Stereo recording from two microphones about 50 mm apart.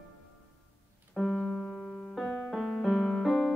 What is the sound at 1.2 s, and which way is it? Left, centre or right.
Keyboard, centre.